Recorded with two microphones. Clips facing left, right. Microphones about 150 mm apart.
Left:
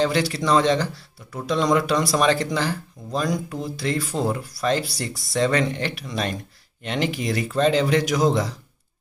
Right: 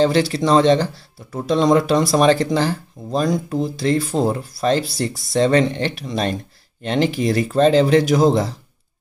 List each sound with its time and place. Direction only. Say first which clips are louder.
0.0 s speech: right 5 dB; 30° right (ahead or behind)